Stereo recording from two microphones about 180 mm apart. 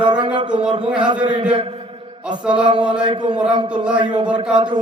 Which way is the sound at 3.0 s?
25° right (ahead or behind).